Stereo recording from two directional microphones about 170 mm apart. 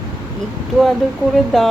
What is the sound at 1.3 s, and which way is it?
Speech, centre (ahead or behind).